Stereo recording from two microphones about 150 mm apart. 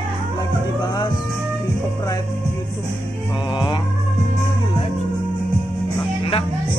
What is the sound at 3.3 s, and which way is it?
Music, 35° left (ahead or behind).